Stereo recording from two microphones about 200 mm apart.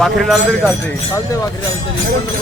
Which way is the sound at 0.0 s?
Centre (ahead or behind).